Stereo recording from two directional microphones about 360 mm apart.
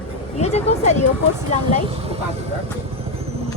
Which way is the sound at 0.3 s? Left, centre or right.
Centre.